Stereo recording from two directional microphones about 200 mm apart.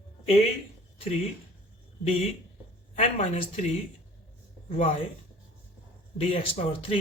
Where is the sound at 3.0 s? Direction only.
35° left (ahead or behind).